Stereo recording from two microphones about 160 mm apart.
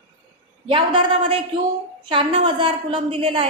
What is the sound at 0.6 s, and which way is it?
A woman's voice, 35° right (ahead or behind).